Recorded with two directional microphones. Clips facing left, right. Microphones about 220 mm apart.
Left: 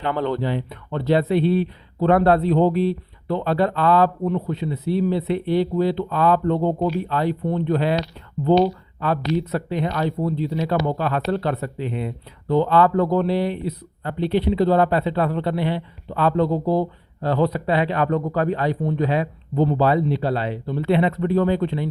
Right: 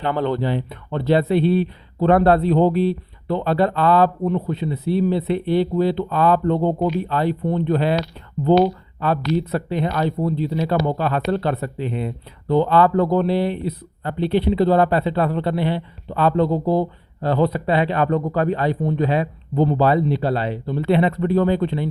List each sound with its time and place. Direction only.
0.0 s speech: 30° right (ahead or behind)
9.0 s speech: 30° right (ahead or behind)